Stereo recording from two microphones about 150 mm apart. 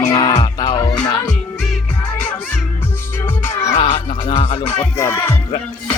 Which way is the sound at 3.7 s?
35° left (ahead or behind).